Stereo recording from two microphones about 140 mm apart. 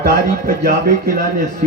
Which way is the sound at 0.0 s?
90° right.